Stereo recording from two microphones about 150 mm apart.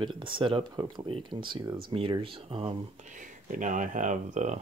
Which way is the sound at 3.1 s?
60° right (ahead or behind).